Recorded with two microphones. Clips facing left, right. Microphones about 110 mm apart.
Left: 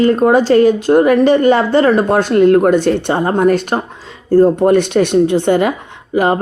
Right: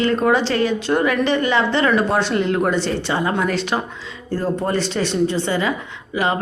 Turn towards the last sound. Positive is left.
turn(degrees=45)  # may be behind; listen again after turning